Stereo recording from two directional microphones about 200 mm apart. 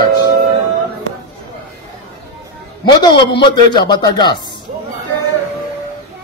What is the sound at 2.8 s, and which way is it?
A man's voice, 20° left (ahead or behind).